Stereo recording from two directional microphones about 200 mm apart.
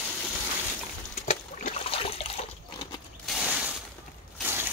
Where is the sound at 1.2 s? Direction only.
30° left (ahead or behind).